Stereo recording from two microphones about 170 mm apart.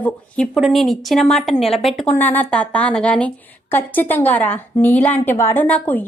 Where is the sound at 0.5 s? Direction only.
Centre (ahead or behind).